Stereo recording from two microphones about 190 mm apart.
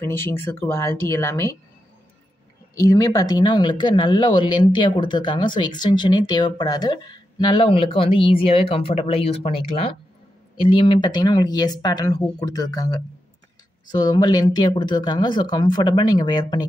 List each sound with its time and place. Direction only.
0.0 s speech: 15° left (ahead or behind)
2.8 s speech: 20° left (ahead or behind)